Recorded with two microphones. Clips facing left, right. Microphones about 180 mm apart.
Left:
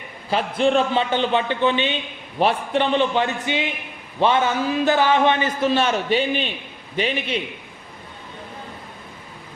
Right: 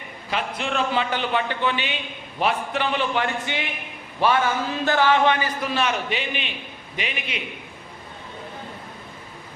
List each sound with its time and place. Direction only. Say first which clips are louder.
0.3 s a man's voice: left 8 dB; 35° left (ahead or behind)